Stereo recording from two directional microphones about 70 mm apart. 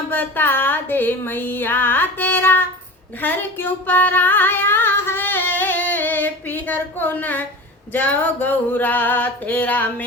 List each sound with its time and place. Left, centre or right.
0.1 s female singing: left